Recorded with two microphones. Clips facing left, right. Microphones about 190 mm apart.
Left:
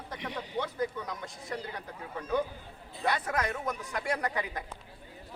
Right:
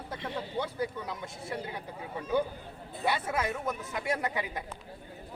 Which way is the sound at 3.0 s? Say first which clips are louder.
Even; 5° right (ahead or behind).